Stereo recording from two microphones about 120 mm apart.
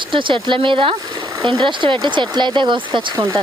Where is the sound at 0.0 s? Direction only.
45° right (ahead or behind).